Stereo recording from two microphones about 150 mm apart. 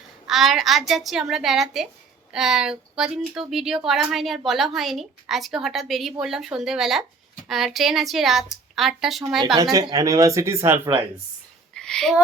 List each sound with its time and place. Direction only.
0.3 s speech: centre (ahead or behind)
9.7 s speech: 25° right (ahead or behind)
11.7 s a sound: 5° left (ahead or behind)